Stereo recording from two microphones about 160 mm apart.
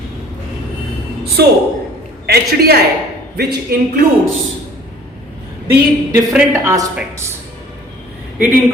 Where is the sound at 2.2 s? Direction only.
80° right.